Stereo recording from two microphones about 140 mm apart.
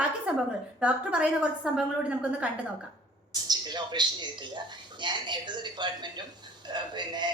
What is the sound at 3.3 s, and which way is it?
A man's voice, 30° right (ahead or behind).